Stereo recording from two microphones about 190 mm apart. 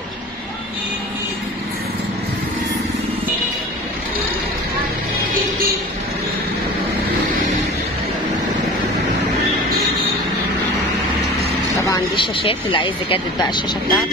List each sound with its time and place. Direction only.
11.8 s vehicle: 15° left (ahead or behind)
12.4 s speech: 25° left (ahead or behind)